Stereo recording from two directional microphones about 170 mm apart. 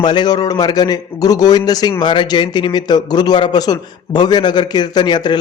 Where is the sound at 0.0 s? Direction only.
25° left (ahead or behind).